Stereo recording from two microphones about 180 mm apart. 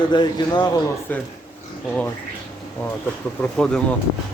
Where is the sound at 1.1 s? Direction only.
10° left (ahead or behind).